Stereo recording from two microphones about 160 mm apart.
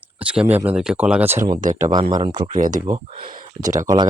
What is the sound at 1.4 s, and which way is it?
Speech, 55° right (ahead or behind).